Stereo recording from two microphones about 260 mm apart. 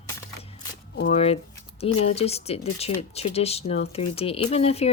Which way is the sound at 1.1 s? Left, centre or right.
Left.